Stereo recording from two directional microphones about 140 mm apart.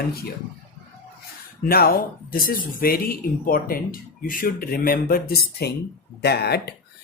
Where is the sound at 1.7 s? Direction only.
90° left.